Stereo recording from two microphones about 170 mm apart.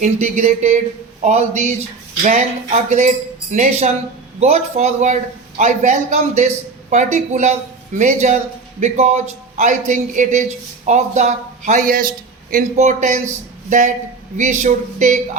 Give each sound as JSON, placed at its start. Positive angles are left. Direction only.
{"t": 0.0, "sound": "a man's voice", "side_deg": -45}